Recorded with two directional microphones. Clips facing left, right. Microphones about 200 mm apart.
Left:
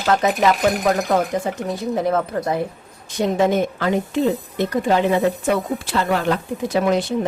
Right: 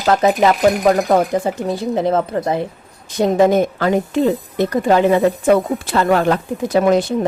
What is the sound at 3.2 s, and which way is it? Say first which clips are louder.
Speech: right 5 dB; 40° right (ahead or behind).